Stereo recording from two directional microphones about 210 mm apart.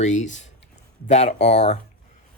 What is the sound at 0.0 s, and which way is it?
Speech, 35° left (ahead or behind).